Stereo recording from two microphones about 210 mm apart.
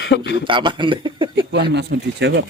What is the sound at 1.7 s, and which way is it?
Speech, 55° right (ahead or behind).